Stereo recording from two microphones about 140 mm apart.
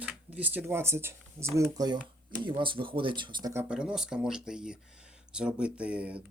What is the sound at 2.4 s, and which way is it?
Speech, 35° right (ahead or behind).